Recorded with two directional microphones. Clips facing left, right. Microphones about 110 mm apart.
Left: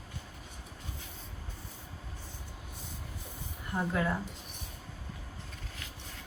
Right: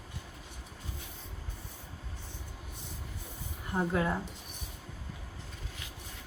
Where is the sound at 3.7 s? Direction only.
20° right (ahead or behind).